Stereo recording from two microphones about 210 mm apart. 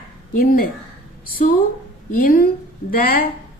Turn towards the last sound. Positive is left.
turn(degrees=45)  # may be behind; listen again after turning